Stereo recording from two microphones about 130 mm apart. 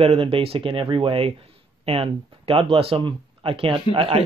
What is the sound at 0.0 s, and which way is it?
Speech, 50° right (ahead or behind).